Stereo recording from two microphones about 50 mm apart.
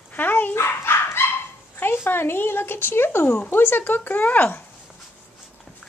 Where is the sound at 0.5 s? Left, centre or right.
Left.